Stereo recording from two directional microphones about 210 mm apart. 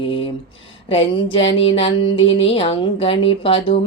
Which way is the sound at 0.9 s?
25° left (ahead or behind).